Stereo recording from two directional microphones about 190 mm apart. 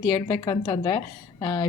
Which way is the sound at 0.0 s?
15° left (ahead or behind).